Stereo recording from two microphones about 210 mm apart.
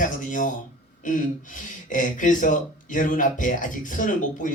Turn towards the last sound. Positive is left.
turn(degrees=40)  # may be behind; listen again after turning